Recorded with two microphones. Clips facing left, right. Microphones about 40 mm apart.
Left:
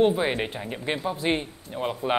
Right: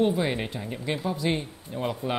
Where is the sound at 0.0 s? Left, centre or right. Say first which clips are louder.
Left 3 dB; left.